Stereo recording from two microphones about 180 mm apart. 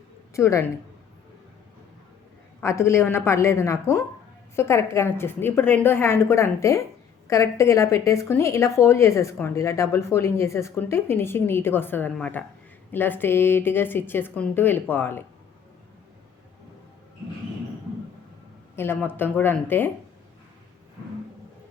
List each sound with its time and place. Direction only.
0.3 s speech: 15° left (ahead or behind)
2.6 s speech: 15° left (ahead or behind)
18.8 s speech: 10° left (ahead or behind)